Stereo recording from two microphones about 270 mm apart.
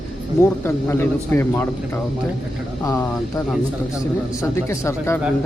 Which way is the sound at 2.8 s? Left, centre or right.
Centre.